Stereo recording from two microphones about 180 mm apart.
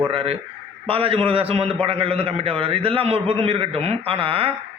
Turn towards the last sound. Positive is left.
turn(degrees=-30)  # may be behind; listen again after turning